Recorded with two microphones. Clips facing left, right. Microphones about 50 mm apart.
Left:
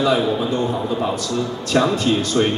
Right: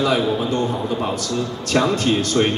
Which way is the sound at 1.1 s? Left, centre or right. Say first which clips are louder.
Left 1 dB; right.